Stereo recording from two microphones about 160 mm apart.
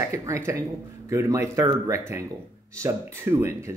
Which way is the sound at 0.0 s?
20° right (ahead or behind).